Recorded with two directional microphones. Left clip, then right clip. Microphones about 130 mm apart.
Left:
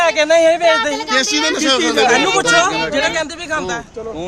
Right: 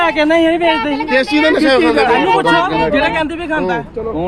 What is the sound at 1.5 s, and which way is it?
Speech, 90° left.